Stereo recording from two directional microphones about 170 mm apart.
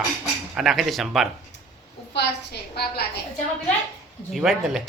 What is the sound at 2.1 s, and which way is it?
Speech, 70° left (ahead or behind).